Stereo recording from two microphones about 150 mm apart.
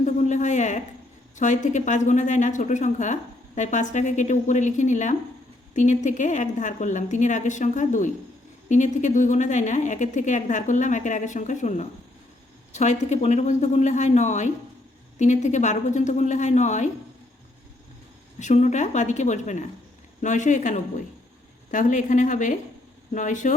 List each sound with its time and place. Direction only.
0.0 s a sound: 55° left (ahead or behind)
1.4 s a woman's voice: 55° left (ahead or behind)
18.3 s a woman's voice: 50° left (ahead or behind)